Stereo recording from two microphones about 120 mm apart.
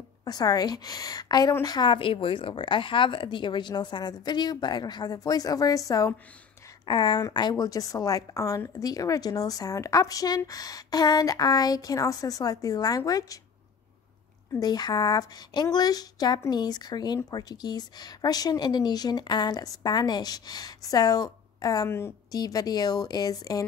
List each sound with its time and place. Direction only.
0.2 s speech: 35° left (ahead or behind)
6.9 s speech: 40° left (ahead or behind)
14.6 s speech: 35° left (ahead or behind)
22.3 s speech: 30° left (ahead or behind)